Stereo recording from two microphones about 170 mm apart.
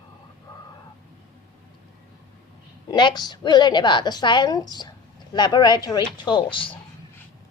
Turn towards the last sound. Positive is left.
turn(degrees=30)  # may be behind; listen again after turning